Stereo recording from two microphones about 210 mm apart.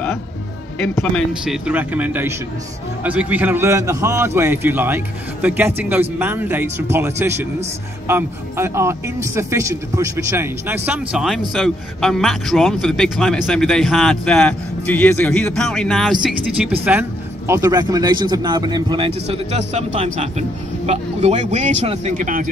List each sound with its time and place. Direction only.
1.4 s a man's voice: 5° right (ahead or behind)
17.5 s speech: 15° right (ahead or behind); by 22.5 s 40° right (ahead or behind)